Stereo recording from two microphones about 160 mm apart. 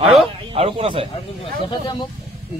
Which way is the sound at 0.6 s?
35° right (ahead or behind).